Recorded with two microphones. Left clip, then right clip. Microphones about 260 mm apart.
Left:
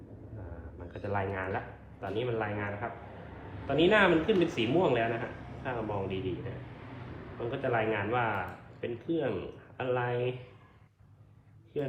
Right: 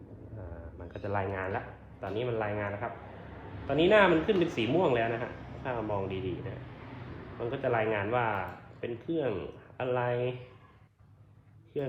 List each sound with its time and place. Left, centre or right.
1.0 s a sound: right
3.7 s a man's voice: right
7.5 s a man's voice: right
11.7 s a man's voice: right